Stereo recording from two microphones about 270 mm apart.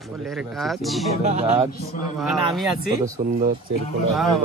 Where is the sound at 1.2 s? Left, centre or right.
Right.